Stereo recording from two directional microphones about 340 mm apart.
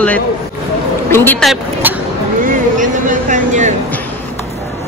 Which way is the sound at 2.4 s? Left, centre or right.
Right.